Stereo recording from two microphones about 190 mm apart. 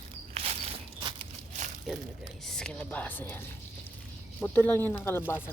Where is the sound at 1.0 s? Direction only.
25° right (ahead or behind).